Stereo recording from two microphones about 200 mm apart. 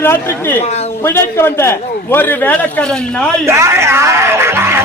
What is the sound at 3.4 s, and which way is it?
Speech, 15° right (ahead or behind).